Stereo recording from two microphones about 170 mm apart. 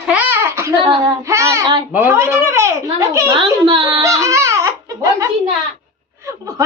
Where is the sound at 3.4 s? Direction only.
30° right (ahead or behind).